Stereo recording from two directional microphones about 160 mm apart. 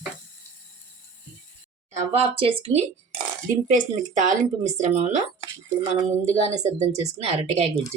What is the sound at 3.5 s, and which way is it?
Speech, 55° right (ahead or behind).